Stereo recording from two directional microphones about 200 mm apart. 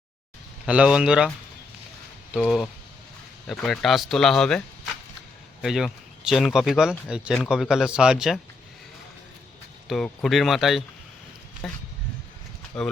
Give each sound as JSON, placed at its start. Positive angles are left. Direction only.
{"t": 0.6, "sound": "speech", "side_deg": -5}
{"t": 2.3, "sound": "speech", "side_deg": 0}
{"t": 5.6, "sound": "speech", "side_deg": 0}
{"t": 9.8, "sound": "speech", "side_deg": 0}